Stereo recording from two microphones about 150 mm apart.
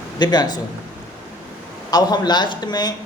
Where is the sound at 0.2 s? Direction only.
30° left (ahead or behind).